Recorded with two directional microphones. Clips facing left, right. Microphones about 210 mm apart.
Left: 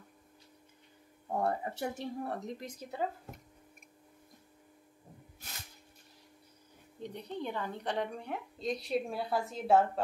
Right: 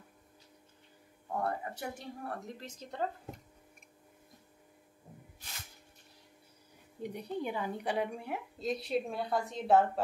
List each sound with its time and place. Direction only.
1.3 s speech: 25° left (ahead or behind); by 3.1 s 10° left (ahead or behind)
7.0 s a woman's voice: 10° right (ahead or behind)